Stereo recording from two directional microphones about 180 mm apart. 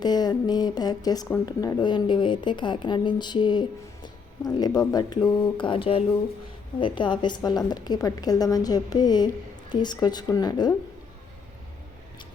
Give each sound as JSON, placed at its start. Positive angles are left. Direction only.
{"t": 0.0, "sound": "speech", "side_deg": 20}